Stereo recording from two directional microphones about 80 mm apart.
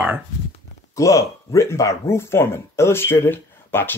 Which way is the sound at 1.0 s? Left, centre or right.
Left.